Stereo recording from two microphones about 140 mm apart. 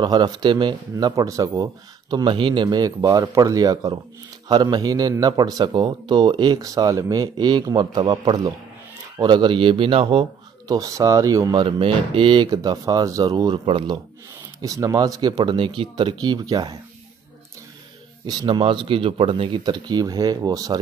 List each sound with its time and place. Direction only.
0.0 s speech: 30° right (ahead or behind)
10.7 s speech: 25° right (ahead or behind); by 13.9 s 40° right (ahead or behind)
14.6 s speech: 25° right (ahead or behind)
18.2 s speech: 30° right (ahead or behind)